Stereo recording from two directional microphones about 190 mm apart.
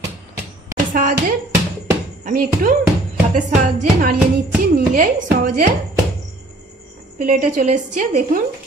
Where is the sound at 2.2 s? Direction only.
45° right (ahead or behind).